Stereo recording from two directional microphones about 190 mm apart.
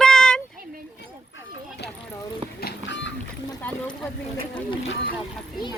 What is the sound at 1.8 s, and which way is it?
Clip-clop, 60° left (ahead or behind).